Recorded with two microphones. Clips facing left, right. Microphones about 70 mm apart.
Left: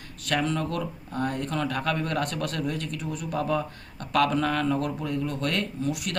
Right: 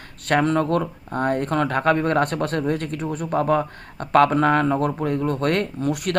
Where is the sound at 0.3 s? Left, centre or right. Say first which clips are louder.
Right 8 dB; right.